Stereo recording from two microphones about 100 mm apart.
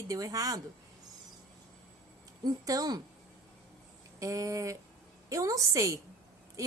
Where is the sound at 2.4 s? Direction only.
40° right (ahead or behind).